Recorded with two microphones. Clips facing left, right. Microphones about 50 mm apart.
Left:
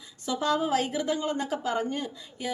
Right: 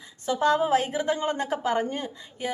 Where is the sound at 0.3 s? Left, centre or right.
Right.